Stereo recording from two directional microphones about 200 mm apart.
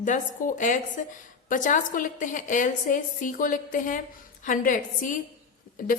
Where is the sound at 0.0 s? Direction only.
40° left (ahead or behind).